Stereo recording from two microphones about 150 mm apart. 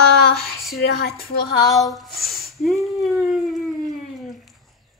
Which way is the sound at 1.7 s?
Centre (ahead or behind).